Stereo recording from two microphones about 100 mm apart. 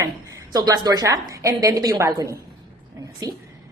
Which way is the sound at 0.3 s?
35° right (ahead or behind).